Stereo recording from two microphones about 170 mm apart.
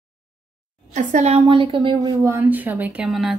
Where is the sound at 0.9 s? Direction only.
45° right (ahead or behind).